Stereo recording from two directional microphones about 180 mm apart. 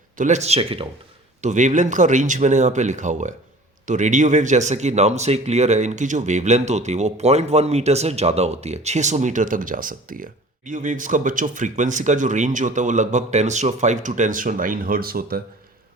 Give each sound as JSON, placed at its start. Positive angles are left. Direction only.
{"t": 0.2, "sound": "speech", "side_deg": -40}
{"t": 1.4, "sound": "speech", "side_deg": -40}